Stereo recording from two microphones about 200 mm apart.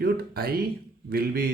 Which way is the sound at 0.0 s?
50° right (ahead or behind).